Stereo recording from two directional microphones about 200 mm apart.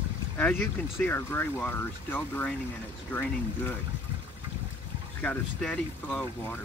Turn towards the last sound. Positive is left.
turn(degrees=5)  # may be behind; listen again after turning